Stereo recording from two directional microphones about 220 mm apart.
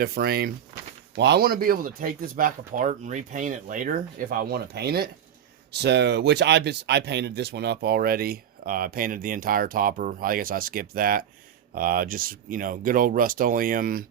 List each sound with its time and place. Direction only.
0.0 s speech: 45° right (ahead or behind)